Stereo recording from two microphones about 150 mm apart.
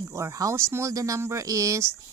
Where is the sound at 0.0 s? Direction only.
20° right (ahead or behind).